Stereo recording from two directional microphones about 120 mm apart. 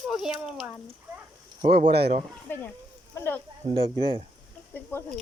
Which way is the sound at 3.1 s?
20° left (ahead or behind).